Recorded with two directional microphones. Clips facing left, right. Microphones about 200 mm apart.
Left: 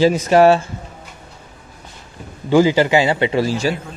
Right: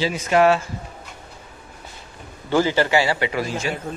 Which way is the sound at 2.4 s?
15° left (ahead or behind).